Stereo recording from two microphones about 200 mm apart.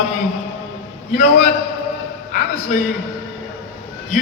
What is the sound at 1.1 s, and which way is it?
Speech, 35° left (ahead or behind).